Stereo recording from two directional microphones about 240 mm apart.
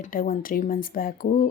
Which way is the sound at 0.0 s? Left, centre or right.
Left.